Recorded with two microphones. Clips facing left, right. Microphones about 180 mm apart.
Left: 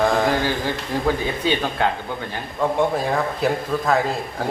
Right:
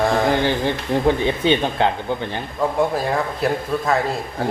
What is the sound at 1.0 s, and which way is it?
A man's voice, 25° right (ahead or behind).